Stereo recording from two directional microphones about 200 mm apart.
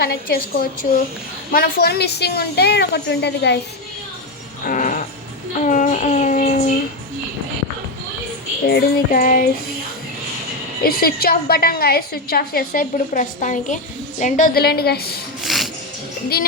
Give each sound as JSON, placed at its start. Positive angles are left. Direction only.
{"t": 0.0, "sound": "a woman's voice", "side_deg": 50}
{"t": 4.6, "sound": "music", "side_deg": 40}
{"t": 5.5, "sound": "child singing", "side_deg": 40}
{"t": 8.6, "sound": "a woman's voice", "side_deg": 50}
{"t": 10.8, "sound": "a woman's voice", "side_deg": 50}
{"t": 15.4, "sound": "music", "side_deg": 0}